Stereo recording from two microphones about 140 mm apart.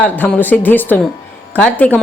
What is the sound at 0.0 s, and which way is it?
A woman's voice, 10° left (ahead or behind).